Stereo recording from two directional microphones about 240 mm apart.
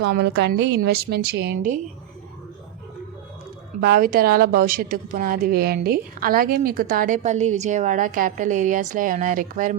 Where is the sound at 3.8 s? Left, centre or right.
Right.